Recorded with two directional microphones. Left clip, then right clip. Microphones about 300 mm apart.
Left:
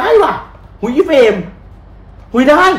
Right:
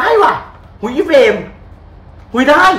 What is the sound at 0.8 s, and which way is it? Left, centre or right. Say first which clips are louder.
Speech: even; centre.